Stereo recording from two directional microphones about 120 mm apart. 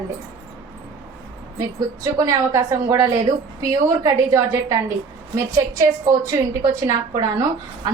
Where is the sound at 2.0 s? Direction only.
30° right (ahead or behind).